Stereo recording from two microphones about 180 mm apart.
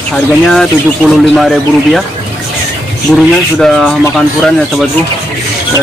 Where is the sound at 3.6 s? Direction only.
Centre (ahead or behind).